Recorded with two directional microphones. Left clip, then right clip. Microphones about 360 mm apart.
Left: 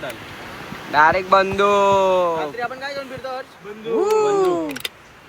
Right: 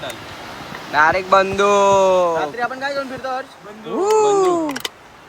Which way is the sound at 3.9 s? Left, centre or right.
Centre.